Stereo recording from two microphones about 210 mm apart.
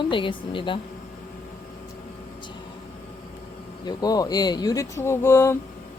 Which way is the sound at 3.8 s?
20° left (ahead or behind).